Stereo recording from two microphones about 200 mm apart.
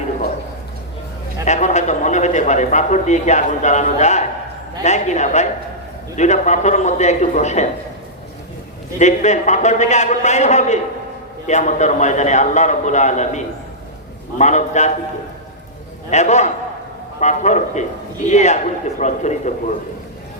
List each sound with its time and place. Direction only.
1.5 s a man's voice: 35° left (ahead or behind)
9.0 s a man's voice: 35° left (ahead or behind)
16.0 s a man's voice: 35° left (ahead or behind)